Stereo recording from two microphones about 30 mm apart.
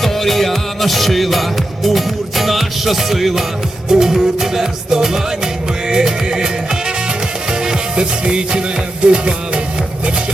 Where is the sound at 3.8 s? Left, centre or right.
Centre; by 8.6 s right.